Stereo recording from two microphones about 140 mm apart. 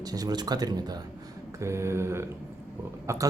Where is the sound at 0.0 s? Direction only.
30° right (ahead or behind).